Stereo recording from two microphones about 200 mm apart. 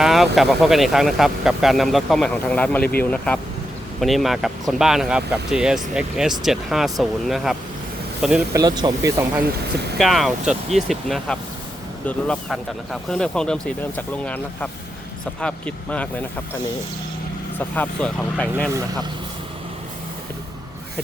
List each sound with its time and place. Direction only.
0.0 s speech: centre (ahead or behind)
8.5 s speech: 20° right (ahead or behind)
10.0 s speech: centre (ahead or behind)
17.6 s speech: 10° left (ahead or behind)